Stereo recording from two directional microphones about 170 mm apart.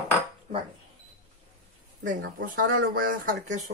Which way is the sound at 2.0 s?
55° right (ahead or behind).